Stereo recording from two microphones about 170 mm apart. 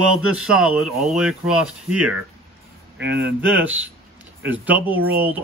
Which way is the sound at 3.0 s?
90° right.